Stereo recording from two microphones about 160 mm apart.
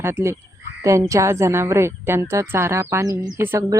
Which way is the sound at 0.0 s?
15° right (ahead or behind).